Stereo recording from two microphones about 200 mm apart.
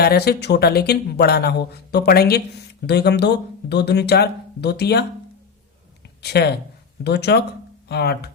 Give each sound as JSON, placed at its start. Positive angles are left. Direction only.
{"t": 0.0, "sound": "speech", "side_deg": 55}
{"t": 6.2, "sound": "speech", "side_deg": 55}